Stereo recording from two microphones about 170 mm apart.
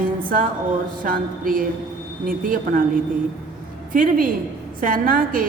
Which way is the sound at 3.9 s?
55° right (ahead or behind).